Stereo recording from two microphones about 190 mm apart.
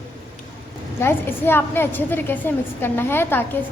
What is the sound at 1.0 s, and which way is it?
A woman's voice, 10° left (ahead or behind).